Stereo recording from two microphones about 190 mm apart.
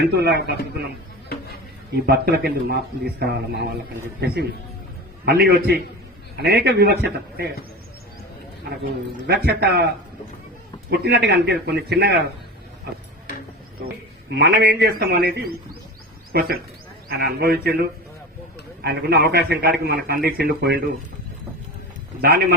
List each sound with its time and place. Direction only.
0.0 s a man's voice: 60° right (ahead or behind)
2.0 s a man's voice: 55° right (ahead or behind)
5.2 s a man's voice: 55° right (ahead or behind)
8.8 s a man's voice: 60° right (ahead or behind)
11.0 s a man's voice: 60° right (ahead or behind)
14.3 s a man's voice: 65° right (ahead or behind)
18.8 s a man's voice: 55° right (ahead or behind)
22.2 s a man's voice: 55° right (ahead or behind)